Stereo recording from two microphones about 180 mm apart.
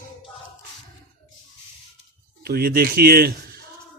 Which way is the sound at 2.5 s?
55° right (ahead or behind).